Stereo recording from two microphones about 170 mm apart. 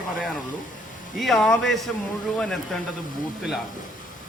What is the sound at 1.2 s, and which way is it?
Speech, centre (ahead or behind).